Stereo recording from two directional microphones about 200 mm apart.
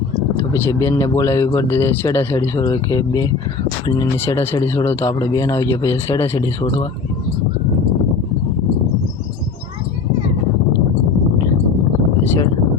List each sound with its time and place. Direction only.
0.5 s speech: 15° left (ahead or behind)